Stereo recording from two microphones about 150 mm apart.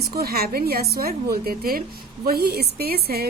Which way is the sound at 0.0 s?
90° right.